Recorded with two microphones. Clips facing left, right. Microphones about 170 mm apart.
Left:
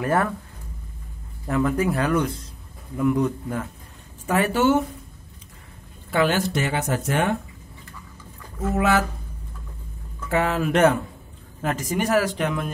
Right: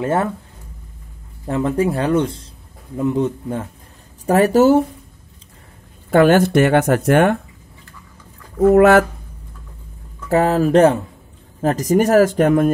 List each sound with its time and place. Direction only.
0.0 s speech: 25° right (ahead or behind)
1.4 s speech: 25° right (ahead or behind)
4.3 s speech: 40° right (ahead or behind)
6.0 s speech: 50° right (ahead or behind)
8.5 s speech: 60° right (ahead or behind)
10.3 s speech: 35° right (ahead or behind)